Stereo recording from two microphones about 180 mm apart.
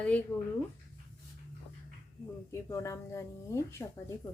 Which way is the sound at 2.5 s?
15° left (ahead or behind).